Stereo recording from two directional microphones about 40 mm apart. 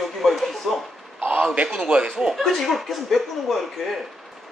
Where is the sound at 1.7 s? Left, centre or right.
Centre.